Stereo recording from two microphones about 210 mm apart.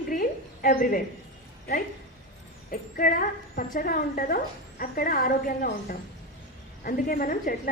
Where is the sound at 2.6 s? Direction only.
45° left (ahead or behind).